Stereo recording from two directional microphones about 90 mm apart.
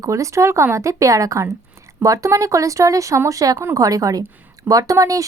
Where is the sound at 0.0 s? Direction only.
35° right (ahead or behind).